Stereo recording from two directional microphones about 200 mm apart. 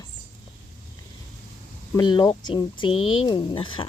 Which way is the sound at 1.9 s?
20° left (ahead or behind).